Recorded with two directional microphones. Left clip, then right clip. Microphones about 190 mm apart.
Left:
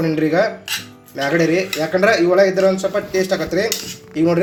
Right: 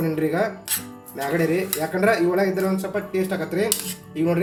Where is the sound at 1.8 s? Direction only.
20° left (ahead or behind).